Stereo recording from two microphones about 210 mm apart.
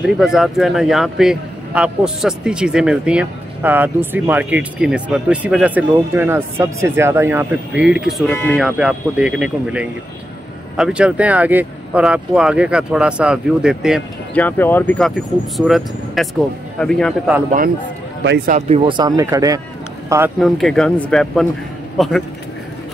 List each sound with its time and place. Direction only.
0.0 s speech: centre (ahead or behind)
8.3 s speech: 10° left (ahead or behind)
8.5 s speech: centre (ahead or behind)
14.4 s speech: 10° left (ahead or behind)
18.2 s speech: 55° right (ahead or behind)
18.9 s speech: 20° right (ahead or behind)
20.3 s a man's voice: centre (ahead or behind)